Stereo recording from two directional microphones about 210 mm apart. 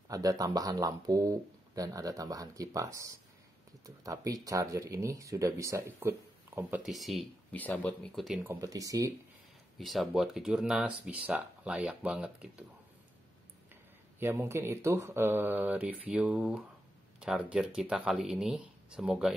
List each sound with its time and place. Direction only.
0.1 s speech: 15° right (ahead or behind); by 8.5 s centre (ahead or behind)
8.5 s speech: 15° right (ahead or behind)
9.8 s speech: centre (ahead or behind)
14.2 s speech: 10° right (ahead or behind)